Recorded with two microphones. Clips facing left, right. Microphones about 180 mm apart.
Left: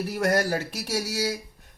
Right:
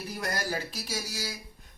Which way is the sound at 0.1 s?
70° left (ahead or behind).